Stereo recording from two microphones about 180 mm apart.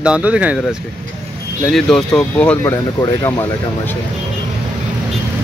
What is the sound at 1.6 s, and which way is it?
Speech, 5° left (ahead or behind).